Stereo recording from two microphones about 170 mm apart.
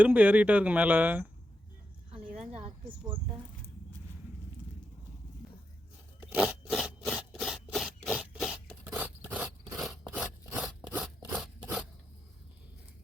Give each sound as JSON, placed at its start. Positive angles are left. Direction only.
{"t": 0.0, "sound": "speech", "side_deg": -10}
{"t": 2.5, "sound": "speech", "side_deg": -40}
{"t": 6.3, "sound": "rub", "side_deg": -5}
{"t": 10.2, "sound": "wood", "side_deg": -10}
{"t": 11.3, "sound": "a sound", "side_deg": -5}